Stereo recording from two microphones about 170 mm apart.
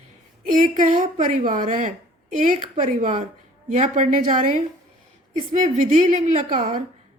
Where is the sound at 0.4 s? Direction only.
55° right (ahead or behind).